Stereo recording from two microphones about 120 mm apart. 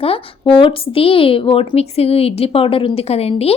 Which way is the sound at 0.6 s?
50° left (ahead or behind).